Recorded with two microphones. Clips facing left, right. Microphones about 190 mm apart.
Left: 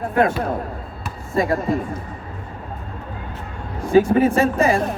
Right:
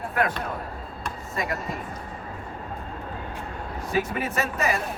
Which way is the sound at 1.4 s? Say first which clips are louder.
Left 11 dB; 30° left (ahead or behind).